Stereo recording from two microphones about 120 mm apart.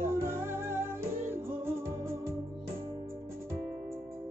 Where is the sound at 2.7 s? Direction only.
50° right (ahead or behind).